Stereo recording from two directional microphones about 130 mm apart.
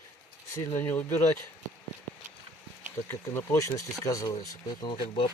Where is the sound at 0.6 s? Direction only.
25° left (ahead or behind).